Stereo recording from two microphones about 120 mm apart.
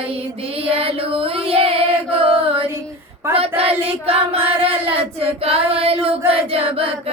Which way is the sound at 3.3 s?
50° right (ahead or behind).